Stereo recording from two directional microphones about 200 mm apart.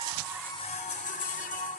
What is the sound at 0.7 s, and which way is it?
Music, 35° left (ahead or behind).